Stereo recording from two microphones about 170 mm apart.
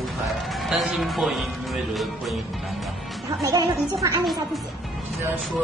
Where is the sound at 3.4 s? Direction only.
20° right (ahead or behind).